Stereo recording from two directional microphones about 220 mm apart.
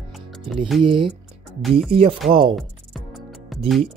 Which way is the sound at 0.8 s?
25° right (ahead or behind).